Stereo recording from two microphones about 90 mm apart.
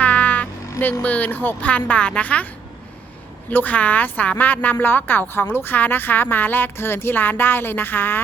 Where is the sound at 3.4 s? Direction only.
20° left (ahead or behind).